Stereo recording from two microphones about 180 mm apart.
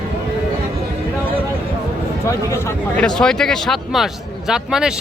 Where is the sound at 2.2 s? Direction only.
15° left (ahead or behind).